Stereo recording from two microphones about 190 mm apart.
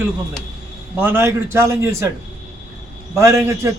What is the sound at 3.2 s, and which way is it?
Speech, 15° right (ahead or behind).